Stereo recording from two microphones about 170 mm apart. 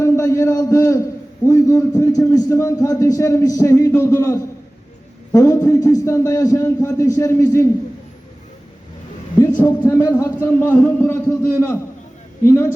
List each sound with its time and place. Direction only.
0.0 s a man's voice: 15° left (ahead or behind)
9.6 s a man's voice: 10° left (ahead or behind)